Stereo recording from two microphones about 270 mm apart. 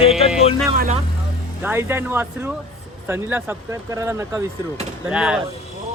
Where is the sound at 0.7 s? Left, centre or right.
Right.